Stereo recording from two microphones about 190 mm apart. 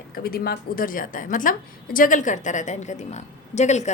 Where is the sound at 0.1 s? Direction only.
55° left (ahead or behind).